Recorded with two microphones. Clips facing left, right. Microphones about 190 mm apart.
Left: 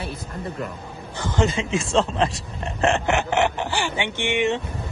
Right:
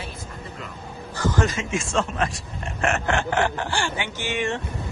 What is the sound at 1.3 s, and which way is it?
Speech, 25° left (ahead or behind).